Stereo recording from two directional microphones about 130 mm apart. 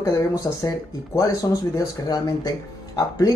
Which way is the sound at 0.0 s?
25° left (ahead or behind).